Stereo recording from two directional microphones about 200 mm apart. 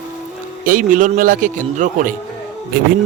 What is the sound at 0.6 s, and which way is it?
A man's voice, 40° right (ahead or behind).